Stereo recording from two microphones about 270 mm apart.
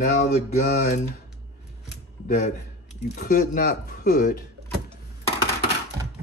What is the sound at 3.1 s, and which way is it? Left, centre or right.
Speech, left.